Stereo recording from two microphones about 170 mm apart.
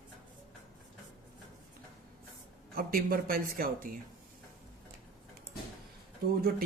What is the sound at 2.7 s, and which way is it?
Speech, 60° right (ahead or behind).